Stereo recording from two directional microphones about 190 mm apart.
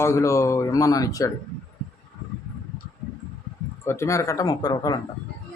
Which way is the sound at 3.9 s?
15° left (ahead or behind).